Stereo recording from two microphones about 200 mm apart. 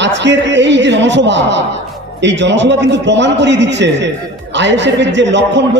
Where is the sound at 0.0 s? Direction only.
60° right (ahead or behind).